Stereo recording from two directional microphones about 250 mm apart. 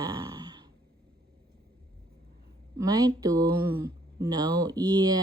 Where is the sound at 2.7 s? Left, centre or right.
Centre.